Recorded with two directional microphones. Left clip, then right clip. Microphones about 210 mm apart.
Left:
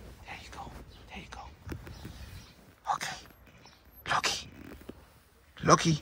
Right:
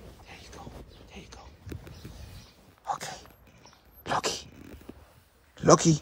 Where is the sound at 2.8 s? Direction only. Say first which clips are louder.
Left 1 dB; 20° right (ahead or behind).